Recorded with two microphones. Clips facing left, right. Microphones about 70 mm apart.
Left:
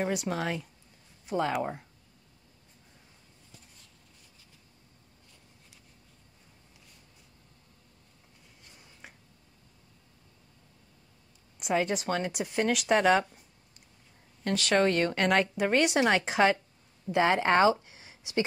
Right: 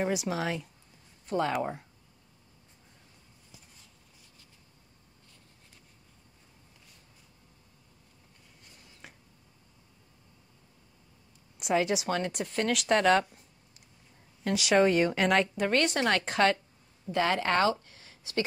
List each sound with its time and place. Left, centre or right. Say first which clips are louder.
0.0 s speech: even; centre
9.0 s a sound: even; centre
11.6 s speech: right 1 dB; centre
17.1 s speech: left 3 dB; left